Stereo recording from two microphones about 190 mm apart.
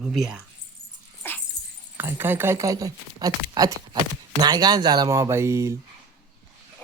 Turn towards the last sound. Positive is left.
turn(degrees=-15)  # may be behind; listen again after turning